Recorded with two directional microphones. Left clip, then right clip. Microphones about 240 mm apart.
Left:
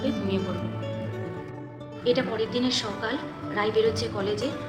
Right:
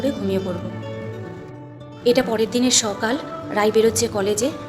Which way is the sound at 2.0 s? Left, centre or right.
Right.